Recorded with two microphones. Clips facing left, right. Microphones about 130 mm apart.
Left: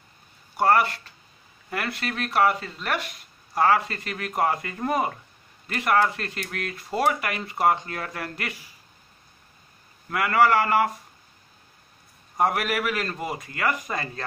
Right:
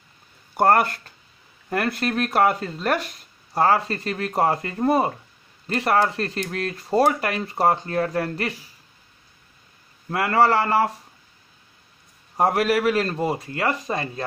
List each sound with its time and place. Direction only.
0.6 s speech: 45° right (ahead or behind)
10.0 s speech: 35° right (ahead or behind)
12.4 s speech: 35° right (ahead or behind)